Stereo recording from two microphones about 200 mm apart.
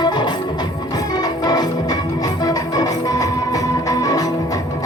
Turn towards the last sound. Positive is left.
turn(degrees=15)  # may be behind; listen again after turning